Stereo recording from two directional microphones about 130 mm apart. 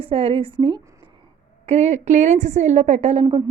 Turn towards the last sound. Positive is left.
turn(degrees=-55)  # may be behind; listen again after turning